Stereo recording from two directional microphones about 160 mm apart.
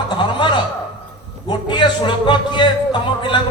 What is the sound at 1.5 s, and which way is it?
Speech, 30° left (ahead or behind).